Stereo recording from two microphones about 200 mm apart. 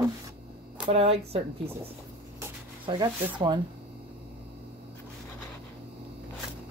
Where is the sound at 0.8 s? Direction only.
30° right (ahead or behind).